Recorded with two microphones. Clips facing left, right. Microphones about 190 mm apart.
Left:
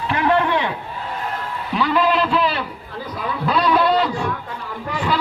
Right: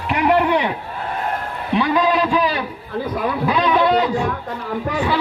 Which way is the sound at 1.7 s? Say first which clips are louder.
Right 1 dB; 15° right (ahead or behind).